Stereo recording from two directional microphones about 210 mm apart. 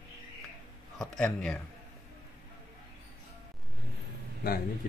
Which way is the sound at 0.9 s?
Centre (ahead or behind).